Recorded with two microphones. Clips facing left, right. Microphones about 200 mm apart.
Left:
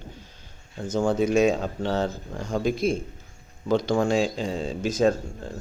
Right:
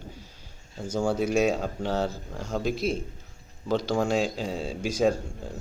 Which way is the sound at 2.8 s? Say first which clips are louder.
Left 4 dB; 50° left (ahead or behind).